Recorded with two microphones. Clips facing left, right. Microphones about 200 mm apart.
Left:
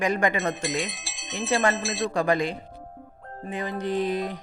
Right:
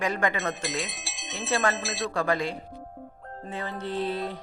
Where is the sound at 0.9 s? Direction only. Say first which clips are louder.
Left 2 dB; centre (ahead or behind).